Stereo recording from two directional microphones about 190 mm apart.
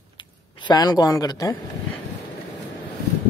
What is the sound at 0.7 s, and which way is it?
Speech, 20° left (ahead or behind).